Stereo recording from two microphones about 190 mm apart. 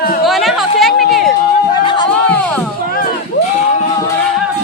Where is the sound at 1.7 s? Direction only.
25° left (ahead or behind).